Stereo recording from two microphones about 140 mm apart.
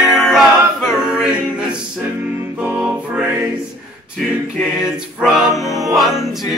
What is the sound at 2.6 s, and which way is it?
Music, 10° right (ahead or behind).